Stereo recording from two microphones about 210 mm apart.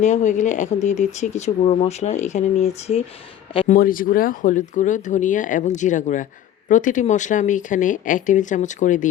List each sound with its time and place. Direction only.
0.0 s speech: 35° left (ahead or behind)
3.7 s speech: 40° left (ahead or behind)